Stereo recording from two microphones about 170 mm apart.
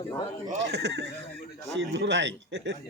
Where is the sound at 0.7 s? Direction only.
85° right.